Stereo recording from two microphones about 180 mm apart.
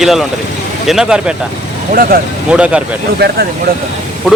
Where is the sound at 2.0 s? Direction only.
55° right (ahead or behind).